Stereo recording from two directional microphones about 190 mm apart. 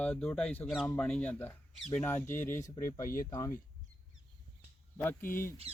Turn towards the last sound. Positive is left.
turn(degrees=10)  # may be behind; listen again after turning